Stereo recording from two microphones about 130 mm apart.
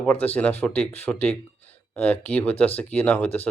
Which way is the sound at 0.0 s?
10° left (ahead or behind).